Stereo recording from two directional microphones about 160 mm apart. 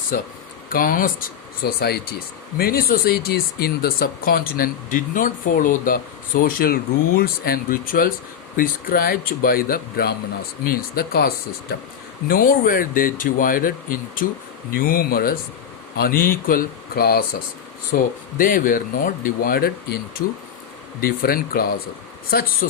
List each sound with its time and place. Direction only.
0.7 s speech: 60° left (ahead or behind)
12.3 s speech: 60° left (ahead or behind)
17.9 s speech: 60° left (ahead or behind)
21.0 s speech: 65° left (ahead or behind)